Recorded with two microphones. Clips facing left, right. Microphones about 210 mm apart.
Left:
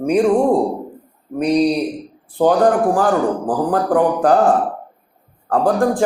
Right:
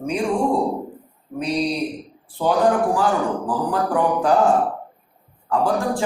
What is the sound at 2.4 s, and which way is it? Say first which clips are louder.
A man's voice: left 4 dB; 50° left (ahead or behind).